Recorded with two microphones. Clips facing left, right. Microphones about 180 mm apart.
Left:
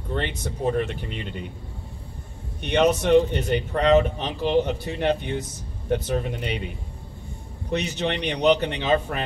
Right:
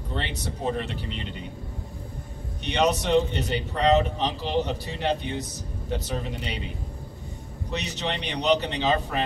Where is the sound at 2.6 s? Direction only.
55° left (ahead or behind).